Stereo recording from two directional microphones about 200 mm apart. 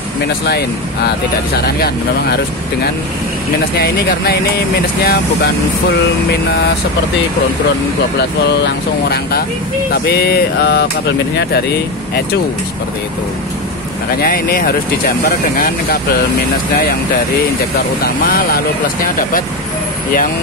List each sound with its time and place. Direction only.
0.5 s speech: 55° left (ahead or behind)
8.2 s speech: 55° left (ahead or behind)
14.2 s speech: 45° left (ahead or behind)
18.0 s speech: 50° left (ahead or behind)